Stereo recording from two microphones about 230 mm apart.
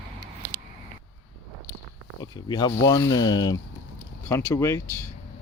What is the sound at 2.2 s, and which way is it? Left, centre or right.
Speech, centre.